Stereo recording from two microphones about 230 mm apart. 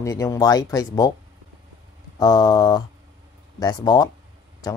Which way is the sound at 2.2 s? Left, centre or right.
Centre.